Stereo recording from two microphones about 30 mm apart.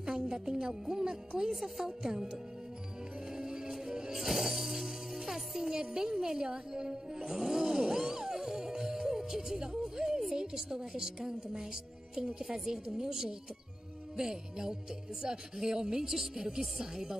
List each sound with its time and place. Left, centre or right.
0.0 s a woman's voice: right
1.5 s speech: centre
3.3 s music: right
4.1 s music: centre
6.1 s a woman's voice: centre
7.2 s music: centre
10.3 s a woman's voice: centre